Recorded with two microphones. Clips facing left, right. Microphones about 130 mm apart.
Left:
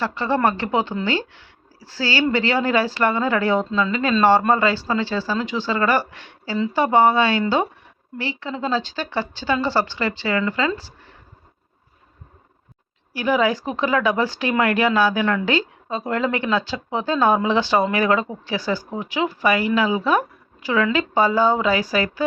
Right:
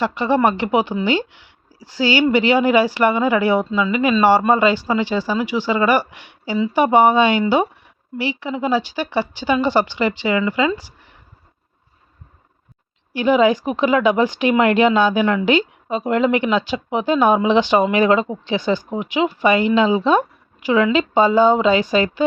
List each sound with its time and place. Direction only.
0.0 s speech: 15° right (ahead or behind)
13.1 s speech: 20° right (ahead or behind)